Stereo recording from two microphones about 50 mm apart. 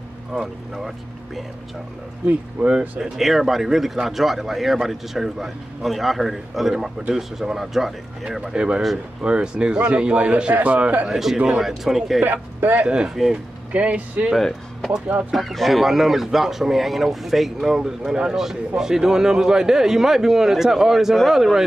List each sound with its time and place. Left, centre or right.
0.3 s speech: centre
2.6 s a man's voice: right
3.0 s a man's voice: centre; by 11.1 s right
11.1 s speech: centre
12.2 s a man's voice: right
12.8 s speech: centre
13.1 s speech: centre
13.7 s a man's voice: right
14.3 s speech: centre